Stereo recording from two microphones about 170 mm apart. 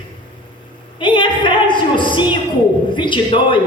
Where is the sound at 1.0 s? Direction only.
30° left (ahead or behind).